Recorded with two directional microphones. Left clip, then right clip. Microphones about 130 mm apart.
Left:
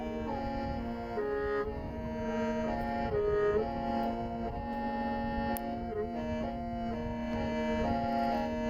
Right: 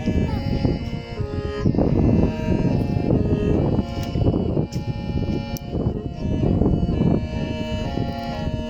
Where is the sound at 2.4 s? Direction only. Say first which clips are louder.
Right 8 dB; 35° right (ahead or behind).